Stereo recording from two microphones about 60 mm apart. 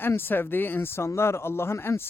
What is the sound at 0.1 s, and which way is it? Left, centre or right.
Speech, left.